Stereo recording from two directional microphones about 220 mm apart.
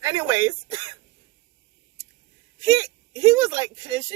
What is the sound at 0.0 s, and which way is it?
Speech, 15° right (ahead or behind).